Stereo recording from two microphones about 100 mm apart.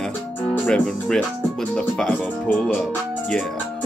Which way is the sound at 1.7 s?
10° left (ahead or behind).